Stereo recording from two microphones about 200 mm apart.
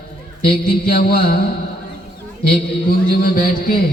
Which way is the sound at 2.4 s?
50° left (ahead or behind).